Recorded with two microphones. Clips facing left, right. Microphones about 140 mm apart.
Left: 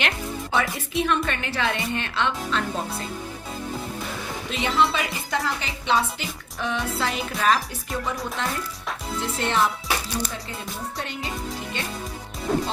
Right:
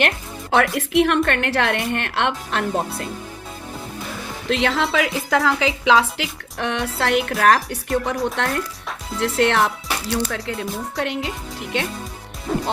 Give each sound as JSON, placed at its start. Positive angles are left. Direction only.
{"t": 0.5, "sound": "a woman's voice", "side_deg": -75}
{"t": 4.4, "sound": "a woman's voice", "side_deg": -85}
{"t": 12.5, "sound": "music", "side_deg": 0}